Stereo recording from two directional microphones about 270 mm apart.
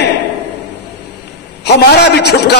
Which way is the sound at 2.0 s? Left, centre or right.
Left.